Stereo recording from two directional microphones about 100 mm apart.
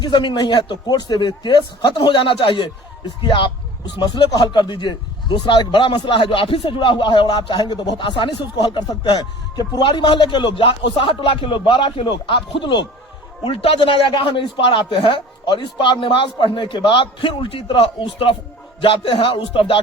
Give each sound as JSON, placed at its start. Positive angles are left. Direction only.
{"t": 0.0, "sound": "a man's voice", "side_deg": 50}
{"t": 13.4, "sound": "a man's voice", "side_deg": 70}